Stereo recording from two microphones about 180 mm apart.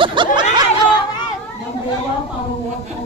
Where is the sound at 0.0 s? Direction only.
25° right (ahead or behind).